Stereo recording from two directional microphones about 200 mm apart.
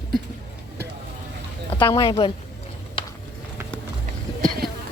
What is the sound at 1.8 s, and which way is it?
Speech, 25° left (ahead or behind).